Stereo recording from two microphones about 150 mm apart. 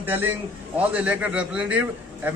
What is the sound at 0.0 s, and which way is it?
A man's voice, 15° right (ahead or behind).